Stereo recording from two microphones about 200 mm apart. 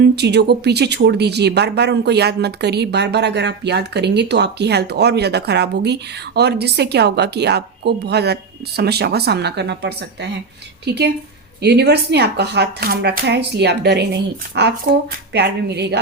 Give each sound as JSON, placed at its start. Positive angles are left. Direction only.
{"t": 0.0, "sound": "speech", "side_deg": -55}